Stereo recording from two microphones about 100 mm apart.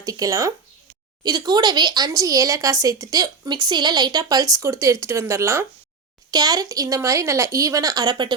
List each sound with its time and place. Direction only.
0.0 s speech: 35° right (ahead or behind)
6.3 s speech: 40° right (ahead or behind)